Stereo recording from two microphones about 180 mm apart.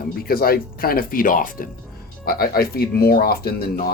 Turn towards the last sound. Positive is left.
turn(degrees=60)  # may be behind; listen again after turning